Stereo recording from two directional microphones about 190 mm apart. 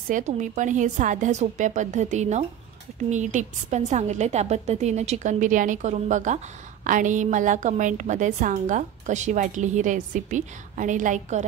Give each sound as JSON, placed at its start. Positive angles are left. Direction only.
{"t": 0.1, "sound": "a woman's voice", "side_deg": -40}